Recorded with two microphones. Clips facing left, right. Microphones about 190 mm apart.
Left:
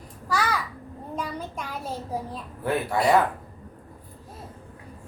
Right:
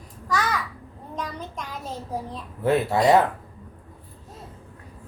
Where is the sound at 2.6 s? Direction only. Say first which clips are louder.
Right 4 dB; 25° right (ahead or behind).